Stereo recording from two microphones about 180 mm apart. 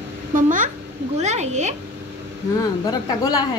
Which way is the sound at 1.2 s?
40° right (ahead or behind).